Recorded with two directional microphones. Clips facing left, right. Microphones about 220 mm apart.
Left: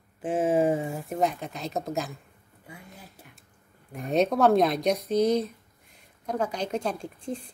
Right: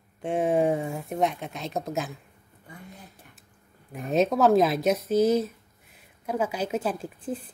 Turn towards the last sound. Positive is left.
turn(degrees=-5)  # may be behind; listen again after turning